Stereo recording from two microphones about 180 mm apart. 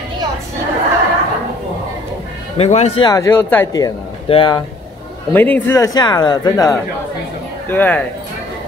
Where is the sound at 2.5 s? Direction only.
35° left (ahead or behind).